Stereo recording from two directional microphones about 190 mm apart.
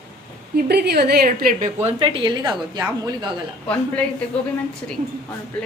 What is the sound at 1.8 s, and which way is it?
A woman's voice, 25° right (ahead or behind).